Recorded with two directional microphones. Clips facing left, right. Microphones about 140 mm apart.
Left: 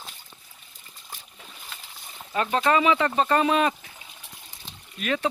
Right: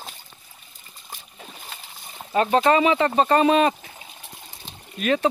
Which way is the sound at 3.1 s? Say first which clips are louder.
Right 4 dB; 30° right (ahead or behind).